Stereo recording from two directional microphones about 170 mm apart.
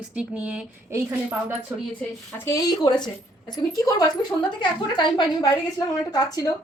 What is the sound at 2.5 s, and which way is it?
A woman's voice, 20° left (ahead or behind).